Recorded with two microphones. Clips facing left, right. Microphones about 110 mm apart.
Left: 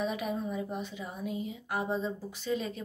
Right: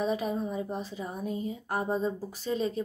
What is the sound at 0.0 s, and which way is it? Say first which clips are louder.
Speech: right 3 dB; 30° right (ahead or behind).